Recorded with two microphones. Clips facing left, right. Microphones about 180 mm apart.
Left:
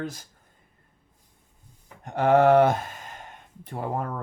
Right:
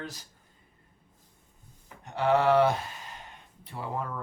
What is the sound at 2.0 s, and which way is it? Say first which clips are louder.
Speech: left 5 dB; 50° left (ahead or behind).